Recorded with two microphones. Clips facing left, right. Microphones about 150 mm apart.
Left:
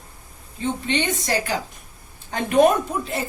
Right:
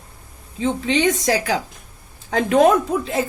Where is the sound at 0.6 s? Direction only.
90° right.